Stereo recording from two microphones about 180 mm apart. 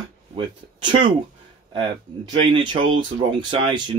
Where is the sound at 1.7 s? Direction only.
25° right (ahead or behind).